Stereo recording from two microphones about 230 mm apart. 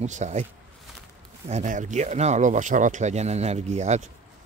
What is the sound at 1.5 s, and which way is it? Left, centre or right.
Speech, right.